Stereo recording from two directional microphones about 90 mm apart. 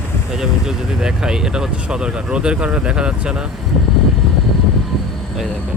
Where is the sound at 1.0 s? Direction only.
5° right (ahead or behind).